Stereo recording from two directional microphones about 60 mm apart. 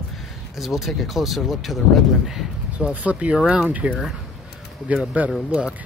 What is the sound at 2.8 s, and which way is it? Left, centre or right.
Speech, right.